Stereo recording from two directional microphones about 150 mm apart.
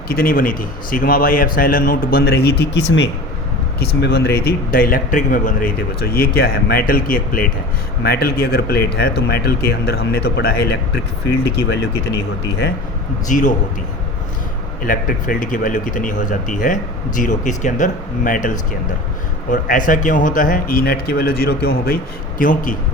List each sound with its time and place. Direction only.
0.1 s a man's voice: 80° left
3.8 s a man's voice: 90° left; by 7.5 s 70° left (ahead or behind)
8.0 s a man's voice: 90° left
13.2 s speech: 55° left (ahead or behind)
14.8 s speech: 65° left (ahead or behind); by 21.9 s 90° left
22.4 s speech: 65° left (ahead or behind)